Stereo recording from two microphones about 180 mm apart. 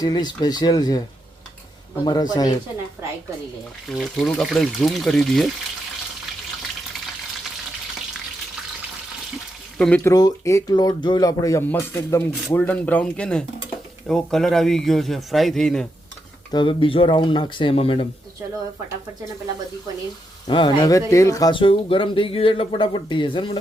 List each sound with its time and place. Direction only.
0.0 s speech: 25° left (ahead or behind)
2.0 s speech: 20° left (ahead or behind)
3.8 s speech: centre (ahead or behind)
9.7 s speech: 5° left (ahead or behind)
10.1 s speech: 20° left (ahead or behind); by 15.9 s 5° left (ahead or behind)
16.5 s speech: 25° left (ahead or behind)
20.5 s speech: 25° left (ahead or behind)